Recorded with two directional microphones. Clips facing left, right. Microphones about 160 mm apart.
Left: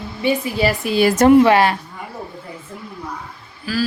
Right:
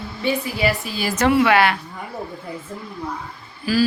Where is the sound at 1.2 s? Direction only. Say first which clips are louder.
Left 4 dB; 40° left (ahead or behind).